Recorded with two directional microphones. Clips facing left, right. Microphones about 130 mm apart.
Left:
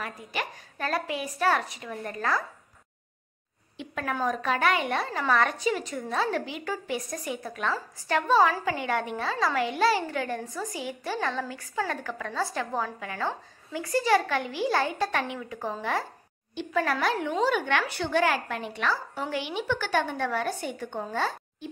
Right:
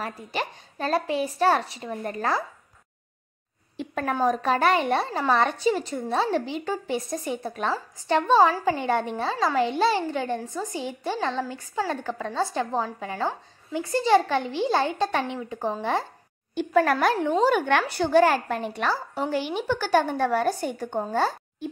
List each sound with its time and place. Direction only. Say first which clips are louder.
0.0 s a woman's voice: right 3 dB; 30° right (ahead or behind)
3.7 s a woman's voice: right 4 dB; 40° right (ahead or behind)
16.5 s a woman's voice: right 6 dB; 50° right (ahead or behind)